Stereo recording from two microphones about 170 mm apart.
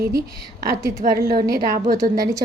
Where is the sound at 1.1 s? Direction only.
60° right (ahead or behind).